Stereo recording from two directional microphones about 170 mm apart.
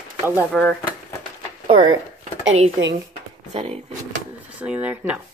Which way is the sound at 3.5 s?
35° right (ahead or behind).